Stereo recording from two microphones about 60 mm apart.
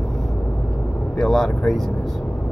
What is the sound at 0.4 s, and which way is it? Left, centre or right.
Vehicle, left.